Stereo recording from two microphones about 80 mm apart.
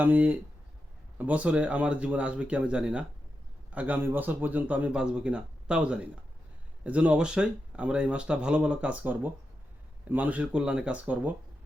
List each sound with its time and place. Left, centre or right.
0.0 s a man's voice: right